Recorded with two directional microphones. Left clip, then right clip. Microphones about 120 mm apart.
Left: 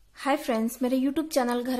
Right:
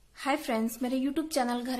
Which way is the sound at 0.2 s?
30° left (ahead or behind).